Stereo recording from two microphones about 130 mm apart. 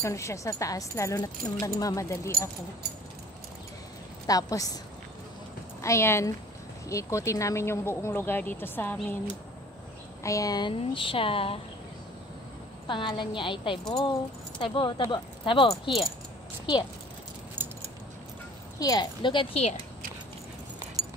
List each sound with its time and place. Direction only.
0.0 s a woman's voice: 20° left (ahead or behind)
4.3 s a woman's voice: 30° left (ahead or behind)
5.8 s a woman's voice: 20° left (ahead or behind)
10.2 s a woman's voice: 25° left (ahead or behind)
10.7 s speech: 40° left (ahead or behind)
12.8 s a woman's voice: 40° left (ahead or behind)
17.6 s keys jangling: 15° right (ahead or behind)
18.8 s a woman's voice: 30° left (ahead or behind)
21.0 s a sound: 5° right (ahead or behind)